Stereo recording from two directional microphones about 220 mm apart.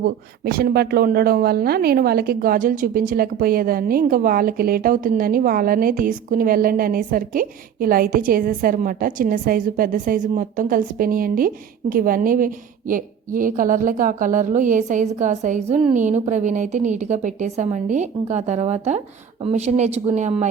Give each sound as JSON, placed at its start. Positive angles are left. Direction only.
{"t": 0.0, "sound": "speech", "side_deg": -45}